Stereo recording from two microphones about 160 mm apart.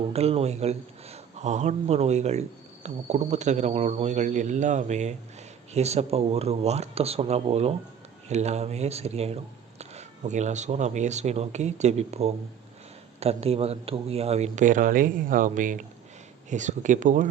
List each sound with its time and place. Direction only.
0.1 s speech: 40° right (ahead or behind)